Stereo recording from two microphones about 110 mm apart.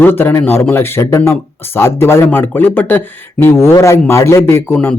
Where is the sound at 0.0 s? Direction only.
20° left (ahead or behind).